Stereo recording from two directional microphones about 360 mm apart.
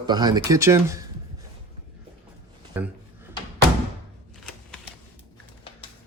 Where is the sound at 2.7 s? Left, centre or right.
Centre.